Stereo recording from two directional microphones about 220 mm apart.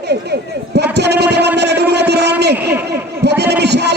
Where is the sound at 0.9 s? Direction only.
50° right (ahead or behind).